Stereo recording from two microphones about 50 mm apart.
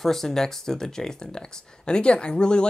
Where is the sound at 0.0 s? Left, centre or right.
Centre.